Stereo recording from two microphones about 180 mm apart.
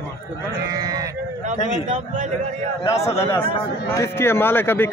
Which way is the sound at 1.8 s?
45° right (ahead or behind).